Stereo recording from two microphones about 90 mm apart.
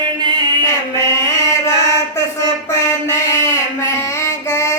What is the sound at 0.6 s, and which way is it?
Mantra, 30° left (ahead or behind).